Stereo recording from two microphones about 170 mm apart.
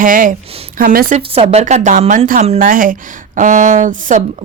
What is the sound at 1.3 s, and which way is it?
A woman's voice, 40° right (ahead or behind).